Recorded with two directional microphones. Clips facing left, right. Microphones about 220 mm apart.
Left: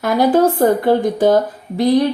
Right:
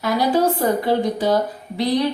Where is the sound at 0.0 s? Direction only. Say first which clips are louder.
Left 5 dB; 50° left (ahead or behind).